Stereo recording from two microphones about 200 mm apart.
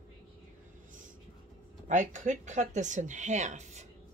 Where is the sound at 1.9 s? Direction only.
40° right (ahead or behind).